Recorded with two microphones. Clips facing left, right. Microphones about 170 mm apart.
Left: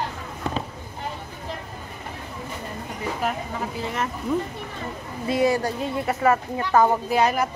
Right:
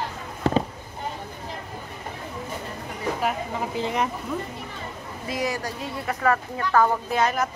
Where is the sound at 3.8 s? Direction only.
15° right (ahead or behind).